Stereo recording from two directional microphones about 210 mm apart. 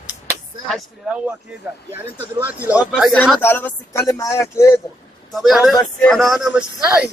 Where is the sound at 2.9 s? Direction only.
Centre (ahead or behind).